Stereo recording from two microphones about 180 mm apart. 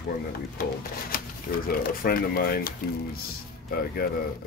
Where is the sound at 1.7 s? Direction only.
55° left (ahead or behind).